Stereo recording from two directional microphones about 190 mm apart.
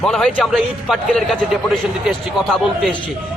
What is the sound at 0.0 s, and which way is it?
A man's voice, 5° left (ahead or behind).